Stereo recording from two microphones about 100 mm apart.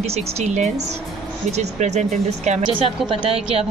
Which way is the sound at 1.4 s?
90° right.